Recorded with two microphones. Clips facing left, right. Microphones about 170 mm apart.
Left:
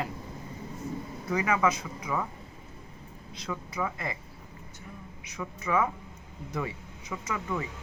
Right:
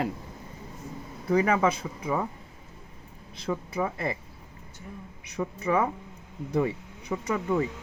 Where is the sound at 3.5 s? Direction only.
30° right (ahead or behind).